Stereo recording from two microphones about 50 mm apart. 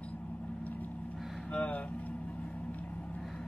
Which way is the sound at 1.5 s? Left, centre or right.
Left.